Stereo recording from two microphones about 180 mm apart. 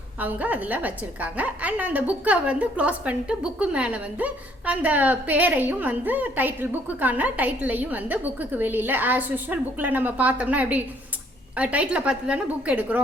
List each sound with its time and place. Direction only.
0.2 s a woman's voice: 10° right (ahead or behind)